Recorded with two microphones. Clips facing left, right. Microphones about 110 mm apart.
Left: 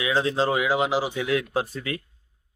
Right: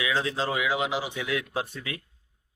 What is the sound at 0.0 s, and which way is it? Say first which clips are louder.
Speech: left 5 dB; 30° left (ahead or behind).